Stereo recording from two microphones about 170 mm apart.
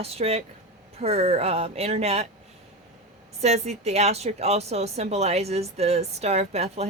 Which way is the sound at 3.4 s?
40° right (ahead or behind).